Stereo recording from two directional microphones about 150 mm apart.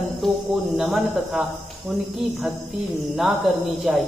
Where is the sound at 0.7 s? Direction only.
5° right (ahead or behind).